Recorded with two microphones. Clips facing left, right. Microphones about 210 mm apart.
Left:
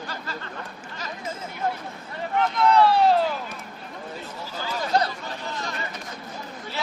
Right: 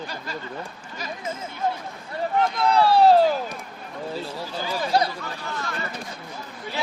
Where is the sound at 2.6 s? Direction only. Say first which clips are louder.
Even; 35° right (ahead or behind).